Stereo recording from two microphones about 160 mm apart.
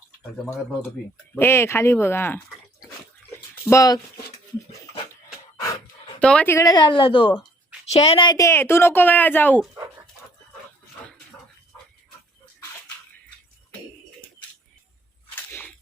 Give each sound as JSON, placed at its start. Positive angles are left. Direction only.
{"t": 1.4, "sound": "a woman's voice", "side_deg": 15}
{"t": 3.5, "sound": "speech", "side_deg": 15}
{"t": 6.1, "sound": "a woman's voice", "side_deg": 10}
{"t": 15.4, "sound": "whip", "side_deg": 10}